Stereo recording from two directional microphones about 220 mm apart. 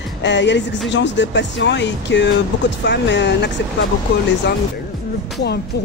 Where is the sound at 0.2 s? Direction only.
55° left (ahead or behind).